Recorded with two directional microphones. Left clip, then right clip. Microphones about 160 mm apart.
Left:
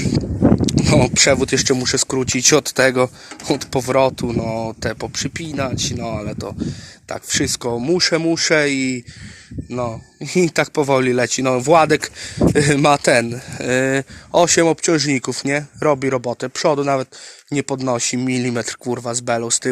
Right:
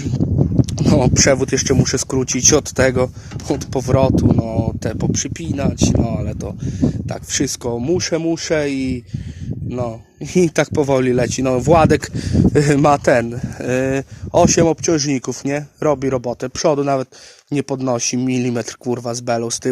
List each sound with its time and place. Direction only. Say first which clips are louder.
0.6 s speech: left 1 dB; 30° right (ahead or behind); by 9.0 s 15° right (ahead or behind)
10.3 s speech: right 1 dB; 40° right (ahead or behind)
16.4 s speech: right 2 dB; 40° right (ahead or behind)